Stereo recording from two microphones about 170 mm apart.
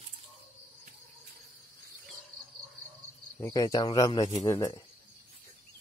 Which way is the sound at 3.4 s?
20° left (ahead or behind).